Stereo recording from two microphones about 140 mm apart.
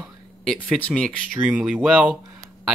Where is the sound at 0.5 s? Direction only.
5° left (ahead or behind).